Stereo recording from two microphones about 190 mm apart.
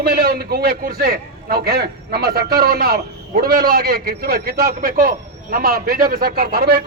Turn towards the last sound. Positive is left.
turn(degrees=-55)  # may be behind; listen again after turning